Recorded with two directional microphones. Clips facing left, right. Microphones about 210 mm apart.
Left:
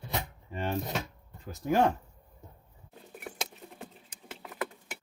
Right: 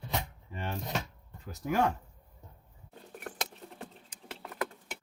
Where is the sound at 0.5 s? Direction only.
25° left (ahead or behind).